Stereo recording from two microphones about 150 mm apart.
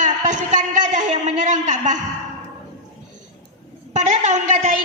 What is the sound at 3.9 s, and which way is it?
Speech, 50° right (ahead or behind).